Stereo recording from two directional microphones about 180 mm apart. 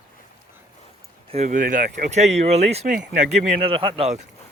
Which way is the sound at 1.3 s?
40° right (ahead or behind).